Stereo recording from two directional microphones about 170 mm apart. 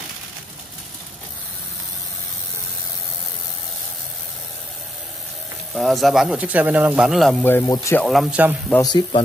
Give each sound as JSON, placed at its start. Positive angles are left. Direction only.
{"t": 5.8, "sound": "speech", "side_deg": 0}
{"t": 7.4, "sound": "speech", "side_deg": 15}
{"t": 8.0, "sound": "speech", "side_deg": 0}
{"t": 8.8, "sound": "speech", "side_deg": 25}